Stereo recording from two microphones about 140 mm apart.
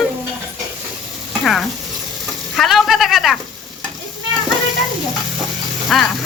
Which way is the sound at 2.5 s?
Centre (ahead or behind).